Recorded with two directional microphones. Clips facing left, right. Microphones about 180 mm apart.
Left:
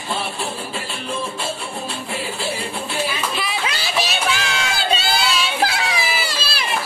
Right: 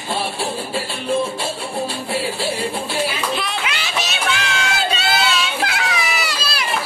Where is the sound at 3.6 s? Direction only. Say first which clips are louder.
Left 1 dB; 35° left (ahead or behind).